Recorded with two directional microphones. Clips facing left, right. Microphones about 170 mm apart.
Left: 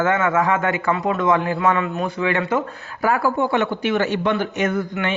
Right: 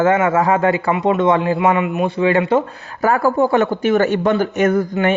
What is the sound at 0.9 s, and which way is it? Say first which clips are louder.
Speech: right 2 dB; 20° right (ahead or behind).